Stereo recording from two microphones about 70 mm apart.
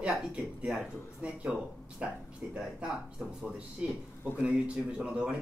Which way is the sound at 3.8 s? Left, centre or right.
Centre.